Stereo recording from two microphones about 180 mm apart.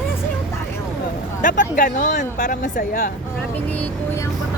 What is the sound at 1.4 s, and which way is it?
Speech, 45° left (ahead or behind).